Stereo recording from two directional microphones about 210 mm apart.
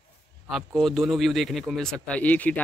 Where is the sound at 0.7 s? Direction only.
Centre (ahead or behind).